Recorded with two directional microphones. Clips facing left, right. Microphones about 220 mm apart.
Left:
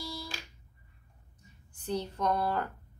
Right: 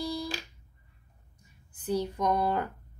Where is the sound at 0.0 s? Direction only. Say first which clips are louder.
Right 8 dB; 15° right (ahead or behind).